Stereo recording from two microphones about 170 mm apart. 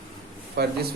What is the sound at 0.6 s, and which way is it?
Speech, 70° right (ahead or behind).